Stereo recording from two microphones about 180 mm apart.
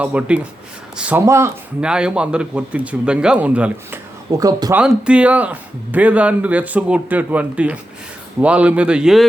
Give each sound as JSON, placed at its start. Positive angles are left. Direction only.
{"t": 0.0, "sound": "speech", "side_deg": -5}
{"t": 1.8, "sound": "speech", "side_deg": -5}
{"t": 4.3, "sound": "speech", "side_deg": -20}
{"t": 4.8, "sound": "speech", "side_deg": -5}